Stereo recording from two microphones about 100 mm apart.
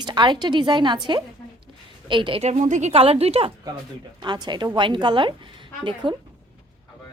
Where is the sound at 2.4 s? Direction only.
80° right.